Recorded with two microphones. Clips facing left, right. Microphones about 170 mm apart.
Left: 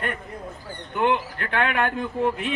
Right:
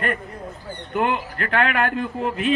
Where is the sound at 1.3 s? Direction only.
65° right (ahead or behind).